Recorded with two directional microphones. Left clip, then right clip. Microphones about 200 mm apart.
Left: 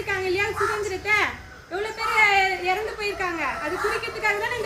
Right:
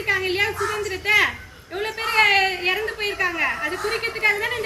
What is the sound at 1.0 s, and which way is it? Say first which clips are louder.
A woman's voice: right 5 dB; 25° left (ahead or behind).